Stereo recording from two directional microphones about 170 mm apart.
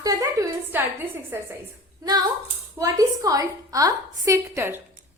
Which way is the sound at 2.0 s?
20° right (ahead or behind).